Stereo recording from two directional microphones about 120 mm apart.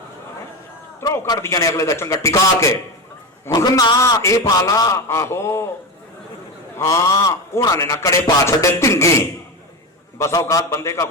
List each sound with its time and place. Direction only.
1.0 s a man's voice: 20° left (ahead or behind)
6.7 s a man's voice: 25° left (ahead or behind)